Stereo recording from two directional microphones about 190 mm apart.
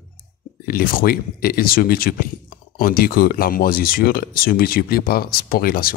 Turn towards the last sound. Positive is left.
turn(degrees=50)  # may be behind; listen again after turning